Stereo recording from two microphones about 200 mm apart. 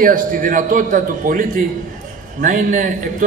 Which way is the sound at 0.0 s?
45° right (ahead or behind).